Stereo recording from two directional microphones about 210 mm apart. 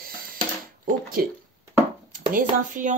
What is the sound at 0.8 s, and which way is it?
Speech, 45° right (ahead or behind).